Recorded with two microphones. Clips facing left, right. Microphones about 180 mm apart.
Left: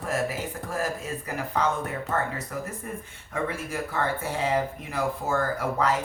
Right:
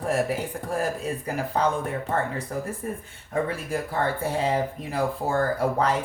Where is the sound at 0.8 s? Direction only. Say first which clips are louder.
Right 2 dB; 30° right (ahead or behind).